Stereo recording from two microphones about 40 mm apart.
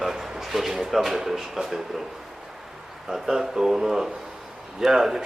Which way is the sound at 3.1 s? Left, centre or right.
Centre.